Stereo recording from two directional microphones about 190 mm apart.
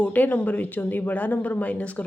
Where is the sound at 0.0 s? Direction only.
10° left (ahead or behind).